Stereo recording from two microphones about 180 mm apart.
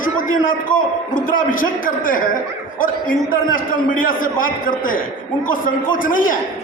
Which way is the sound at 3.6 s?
50° left (ahead or behind).